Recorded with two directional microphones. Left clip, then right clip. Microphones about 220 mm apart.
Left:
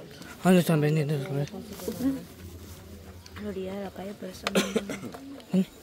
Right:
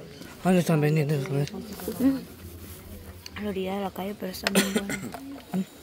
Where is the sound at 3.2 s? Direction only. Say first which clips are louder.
Right 4 dB; 35° right (ahead or behind).